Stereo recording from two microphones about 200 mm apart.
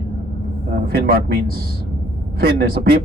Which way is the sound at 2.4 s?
50° right (ahead or behind).